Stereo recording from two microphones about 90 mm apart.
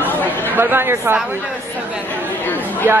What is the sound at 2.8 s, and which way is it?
Speech, 25° right (ahead or behind).